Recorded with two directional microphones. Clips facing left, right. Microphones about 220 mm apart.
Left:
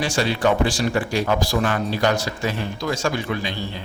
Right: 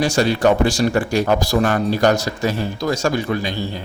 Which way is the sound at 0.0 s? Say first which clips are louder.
Right 5 dB; 45° right (ahead or behind).